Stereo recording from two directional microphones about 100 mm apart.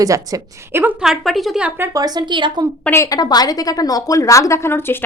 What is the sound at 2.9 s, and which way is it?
A woman's voice, 35° left (ahead or behind).